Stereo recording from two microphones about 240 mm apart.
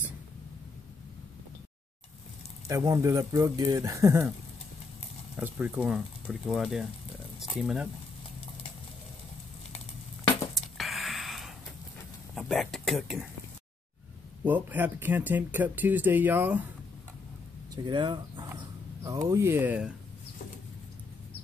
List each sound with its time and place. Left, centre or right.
2.7 s speech: centre
5.3 s speech: centre
10.5 s a sound: centre
12.4 s speech: centre
14.4 s speech: centre
17.7 s speech: centre